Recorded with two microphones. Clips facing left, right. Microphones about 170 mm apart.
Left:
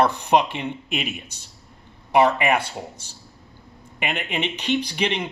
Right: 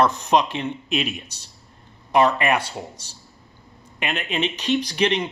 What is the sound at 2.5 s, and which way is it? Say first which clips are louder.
Speech: even; 55° left (ahead or behind).